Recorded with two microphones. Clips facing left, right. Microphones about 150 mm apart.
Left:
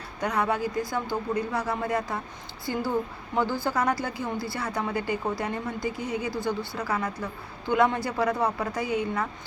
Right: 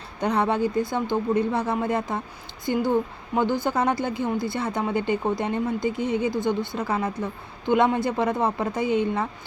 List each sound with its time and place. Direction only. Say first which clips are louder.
0.2 s speech: right 4 dB; 30° right (ahead or behind)